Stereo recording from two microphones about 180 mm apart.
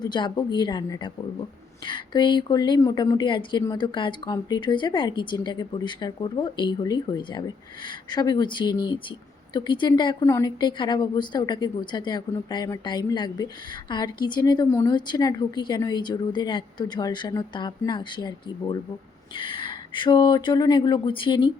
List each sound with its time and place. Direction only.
0.0 s speech: 25° left (ahead or behind)